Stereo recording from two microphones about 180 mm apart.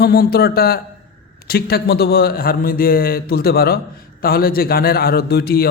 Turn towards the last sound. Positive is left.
turn(degrees=60)  # may be behind; listen again after turning